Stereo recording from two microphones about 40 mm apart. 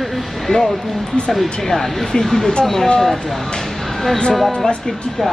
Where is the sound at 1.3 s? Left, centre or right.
Centre.